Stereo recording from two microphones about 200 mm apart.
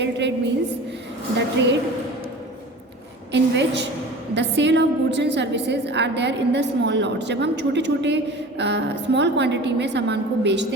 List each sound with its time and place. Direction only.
0.0 s a woman's voice: 60° right (ahead or behind)
1.4 s a woman's voice: 60° right (ahead or behind)
3.3 s a woman's voice: 60° right (ahead or behind)